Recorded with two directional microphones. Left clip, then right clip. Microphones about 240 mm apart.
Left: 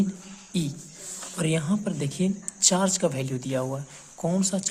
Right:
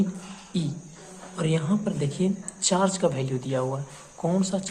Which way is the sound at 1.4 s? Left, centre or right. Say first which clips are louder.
Right 1 dB; left.